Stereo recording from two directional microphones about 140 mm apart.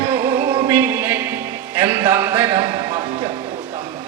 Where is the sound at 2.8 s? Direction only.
30° right (ahead or behind).